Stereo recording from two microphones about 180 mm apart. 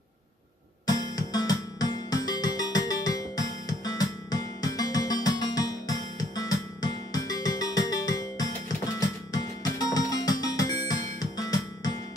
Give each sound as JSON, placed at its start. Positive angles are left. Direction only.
{"t": 0.8, "sound": "music", "side_deg": 20}